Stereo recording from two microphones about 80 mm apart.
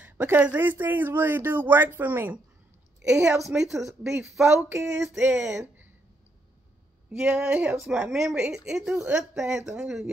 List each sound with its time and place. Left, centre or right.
0.0 s speech: centre
3.1 s speech: centre
4.6 s speech: right
4.9 s speech: centre
7.2 s a woman's voice: centre